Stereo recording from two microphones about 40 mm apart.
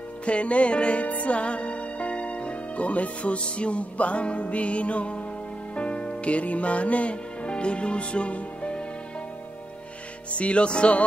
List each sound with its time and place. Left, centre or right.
0.2 s music: left
10.3 s music: left